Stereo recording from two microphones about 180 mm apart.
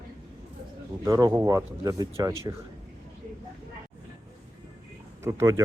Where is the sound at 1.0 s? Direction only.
20° right (ahead or behind).